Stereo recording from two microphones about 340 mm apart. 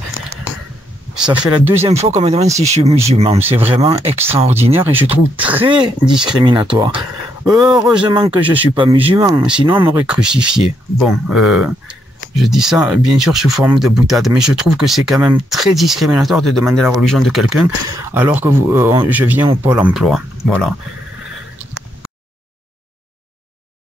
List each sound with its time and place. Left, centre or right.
1.1 s speech: centre
1.8 s speech: centre
4.7 s speech: centre
6.0 s speech: centre
6.4 s speech: centre